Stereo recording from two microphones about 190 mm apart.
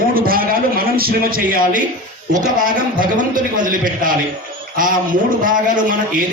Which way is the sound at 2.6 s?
45° right (ahead or behind).